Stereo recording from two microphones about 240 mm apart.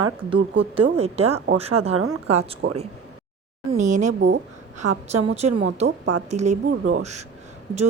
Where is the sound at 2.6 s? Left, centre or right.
Right.